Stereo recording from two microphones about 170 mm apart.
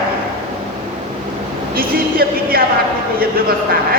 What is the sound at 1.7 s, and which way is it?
Speech, 60° right (ahead or behind).